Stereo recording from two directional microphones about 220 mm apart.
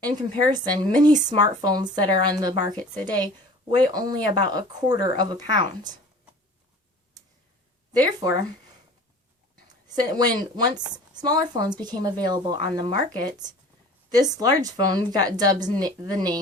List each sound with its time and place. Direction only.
0.0 s speech: 20° right (ahead or behind)
10.0 s speech: 20° right (ahead or behind)